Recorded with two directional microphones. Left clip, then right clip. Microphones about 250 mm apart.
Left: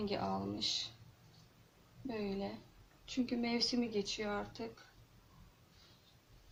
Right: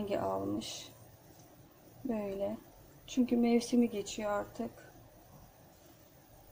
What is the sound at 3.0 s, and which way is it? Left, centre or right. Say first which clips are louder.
Speech: right 7 dB; right.